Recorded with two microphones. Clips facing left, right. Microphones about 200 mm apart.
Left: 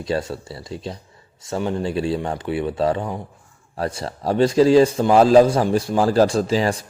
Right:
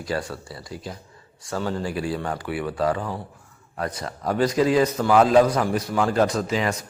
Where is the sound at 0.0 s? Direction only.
25° left (ahead or behind).